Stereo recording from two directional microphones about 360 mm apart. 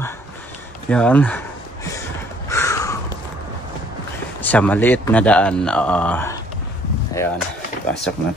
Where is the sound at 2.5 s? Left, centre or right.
Centre.